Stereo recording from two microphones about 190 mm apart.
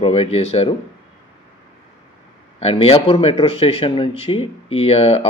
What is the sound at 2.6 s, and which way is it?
Speech, 30° left (ahead or behind).